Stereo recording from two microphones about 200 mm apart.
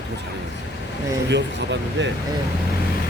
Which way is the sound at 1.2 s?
65° right (ahead or behind).